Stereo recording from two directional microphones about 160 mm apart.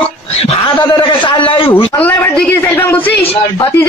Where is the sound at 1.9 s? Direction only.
10° left (ahead or behind).